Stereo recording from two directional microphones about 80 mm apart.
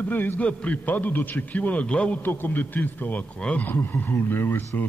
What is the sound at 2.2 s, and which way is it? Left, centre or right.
A man's voice, left.